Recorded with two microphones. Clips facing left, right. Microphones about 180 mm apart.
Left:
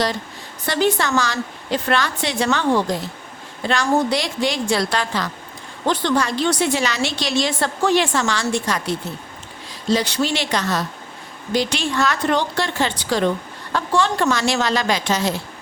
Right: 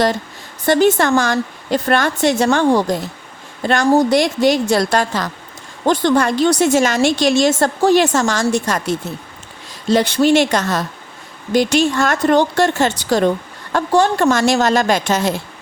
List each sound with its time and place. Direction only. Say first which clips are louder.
0.6 s a woman's voice: right 6 dB; 50° right (ahead or behind)